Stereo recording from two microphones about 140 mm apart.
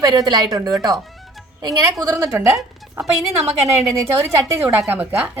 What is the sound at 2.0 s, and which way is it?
A woman's voice, 20° right (ahead or behind).